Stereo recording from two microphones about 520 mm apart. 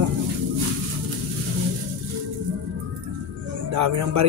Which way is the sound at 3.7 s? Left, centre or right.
Right.